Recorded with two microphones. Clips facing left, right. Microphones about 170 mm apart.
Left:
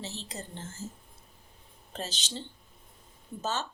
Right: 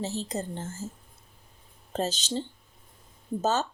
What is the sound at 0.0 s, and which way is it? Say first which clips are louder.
Speech: right 9 dB; 40° right (ahead or behind).